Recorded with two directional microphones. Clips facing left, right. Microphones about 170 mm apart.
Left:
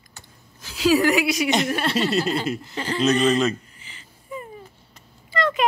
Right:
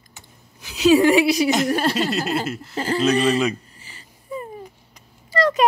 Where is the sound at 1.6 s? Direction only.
40° right (ahead or behind).